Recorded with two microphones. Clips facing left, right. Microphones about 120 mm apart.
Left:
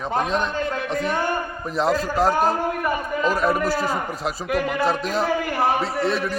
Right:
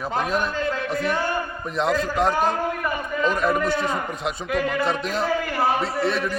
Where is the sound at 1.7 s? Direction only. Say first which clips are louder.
Left 1 dB; centre (ahead or behind).